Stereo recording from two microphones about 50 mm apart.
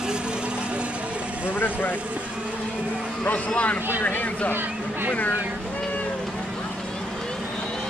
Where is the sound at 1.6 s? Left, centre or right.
Left.